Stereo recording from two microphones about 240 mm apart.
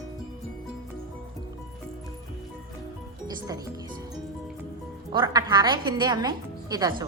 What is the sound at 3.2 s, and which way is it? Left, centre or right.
Speech, centre.